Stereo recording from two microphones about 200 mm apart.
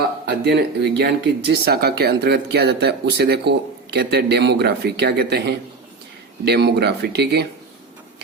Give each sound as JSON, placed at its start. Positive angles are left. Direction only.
{"t": 0.3, "sound": "speech", "side_deg": -60}